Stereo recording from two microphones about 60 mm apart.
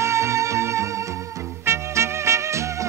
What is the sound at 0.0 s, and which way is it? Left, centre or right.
Music, right.